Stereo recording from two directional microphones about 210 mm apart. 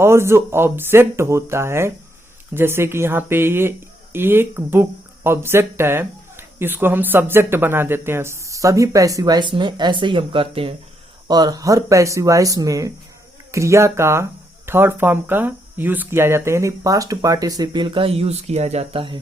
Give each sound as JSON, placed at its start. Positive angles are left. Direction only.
{"t": 0.0, "sound": "speech", "side_deg": -10}